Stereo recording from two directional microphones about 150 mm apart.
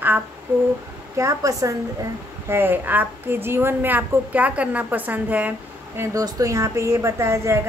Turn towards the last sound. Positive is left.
turn(degrees=-20)  # may be behind; listen again after turning